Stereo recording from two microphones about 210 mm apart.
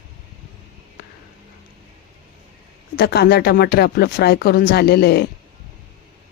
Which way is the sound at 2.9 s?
50° left (ahead or behind).